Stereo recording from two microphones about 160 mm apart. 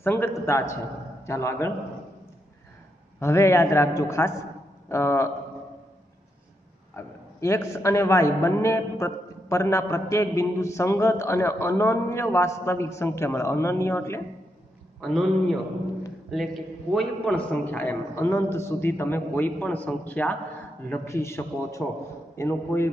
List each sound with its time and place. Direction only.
0.0 s a man's voice: 15° left (ahead or behind)
3.2 s a man's voice: 15° left (ahead or behind)
7.0 s a man's voice: 15° left (ahead or behind)
15.0 s a man's voice: 5° left (ahead or behind)
16.3 s a man's voice: centre (ahead or behind)